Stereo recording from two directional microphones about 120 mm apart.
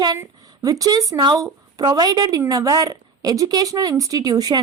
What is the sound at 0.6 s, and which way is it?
A woman's voice, 30° right (ahead or behind).